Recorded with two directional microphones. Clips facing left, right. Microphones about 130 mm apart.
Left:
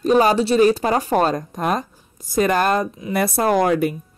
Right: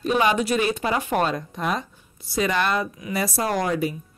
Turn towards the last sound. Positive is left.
turn(degrees=55)  # may be behind; listen again after turning